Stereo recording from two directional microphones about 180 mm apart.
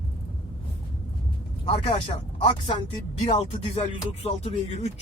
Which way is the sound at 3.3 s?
30° left (ahead or behind).